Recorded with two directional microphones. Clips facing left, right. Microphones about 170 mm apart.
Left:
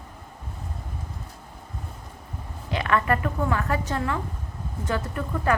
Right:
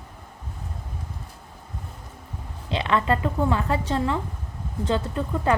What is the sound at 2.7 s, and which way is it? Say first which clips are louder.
A woman's voice: right 1 dB; 25° right (ahead or behind).